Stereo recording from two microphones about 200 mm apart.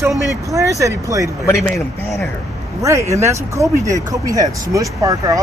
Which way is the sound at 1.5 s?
15° left (ahead or behind).